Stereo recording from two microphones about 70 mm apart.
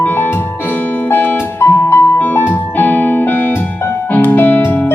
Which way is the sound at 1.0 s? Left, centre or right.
Left.